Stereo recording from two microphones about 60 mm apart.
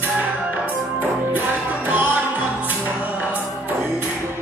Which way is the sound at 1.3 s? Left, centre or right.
Right.